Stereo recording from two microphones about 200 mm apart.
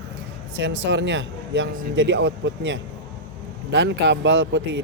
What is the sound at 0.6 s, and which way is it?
A man's voice, 65° right (ahead or behind).